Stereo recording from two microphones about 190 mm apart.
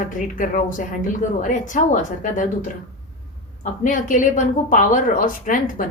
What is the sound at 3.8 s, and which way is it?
Speech, 45° left (ahead or behind).